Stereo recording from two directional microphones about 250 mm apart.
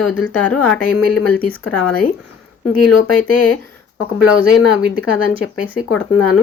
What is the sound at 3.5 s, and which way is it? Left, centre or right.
Speech, left.